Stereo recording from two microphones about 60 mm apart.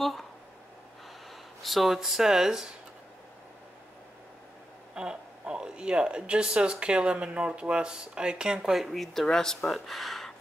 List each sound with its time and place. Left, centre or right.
0.0 s a sound: centre
1.6 s speech: centre
4.9 s speech: centre